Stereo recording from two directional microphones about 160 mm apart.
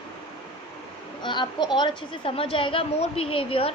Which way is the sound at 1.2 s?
30° left (ahead or behind).